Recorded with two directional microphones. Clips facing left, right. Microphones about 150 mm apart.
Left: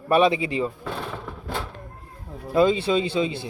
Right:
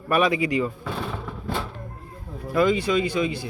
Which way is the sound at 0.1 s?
25° left (ahead or behind).